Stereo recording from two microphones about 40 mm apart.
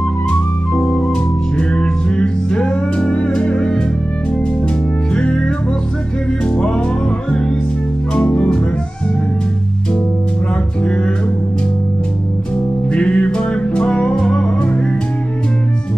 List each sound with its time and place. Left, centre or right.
0.3 s music: left
5.1 s music: left
6.5 s music: left
12.9 s music: left